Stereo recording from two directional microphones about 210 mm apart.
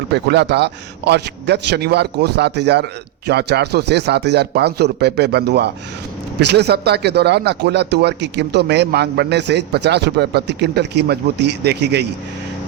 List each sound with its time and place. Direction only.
0.1 s speech: 55° right (ahead or behind)